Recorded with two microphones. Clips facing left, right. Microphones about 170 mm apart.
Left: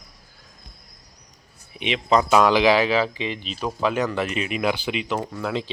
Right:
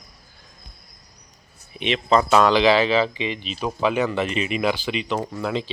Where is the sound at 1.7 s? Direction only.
10° left (ahead or behind).